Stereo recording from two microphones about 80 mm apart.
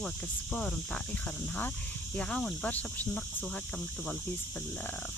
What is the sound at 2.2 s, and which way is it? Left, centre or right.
Speech, centre.